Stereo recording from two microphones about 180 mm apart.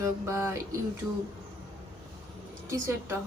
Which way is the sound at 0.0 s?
15° right (ahead or behind).